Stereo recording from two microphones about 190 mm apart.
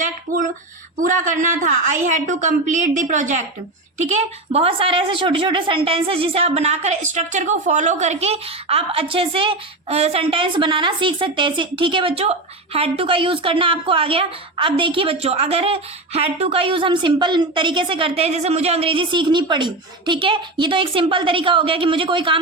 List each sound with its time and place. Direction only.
0.9 s a woman's voice: 45° right (ahead or behind); by 22.4 s 25° right (ahead or behind)